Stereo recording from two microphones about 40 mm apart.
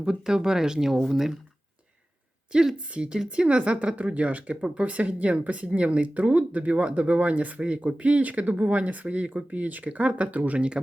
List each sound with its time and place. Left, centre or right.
0.0 s speech: centre
2.7 s a woman's voice: right